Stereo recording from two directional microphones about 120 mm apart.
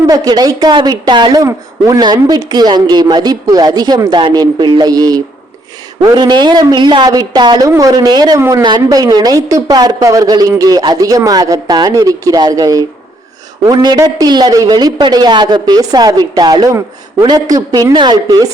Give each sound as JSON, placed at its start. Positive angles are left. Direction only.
{"t": 0.1, "sound": "a woman's voice", "side_deg": -35}
{"t": 8.6, "sound": "a woman's voice", "side_deg": -35}